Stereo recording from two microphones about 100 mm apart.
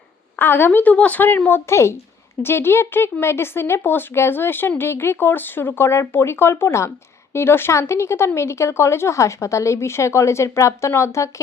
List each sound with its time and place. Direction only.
0.3 s speech: 20° left (ahead or behind)